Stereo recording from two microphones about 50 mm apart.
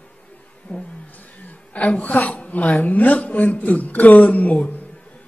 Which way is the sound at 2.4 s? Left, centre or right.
Left.